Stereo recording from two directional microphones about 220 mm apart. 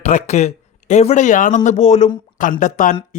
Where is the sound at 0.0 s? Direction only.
30° left (ahead or behind).